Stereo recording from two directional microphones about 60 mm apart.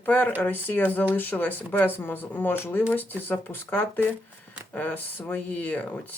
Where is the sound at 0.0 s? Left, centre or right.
Left.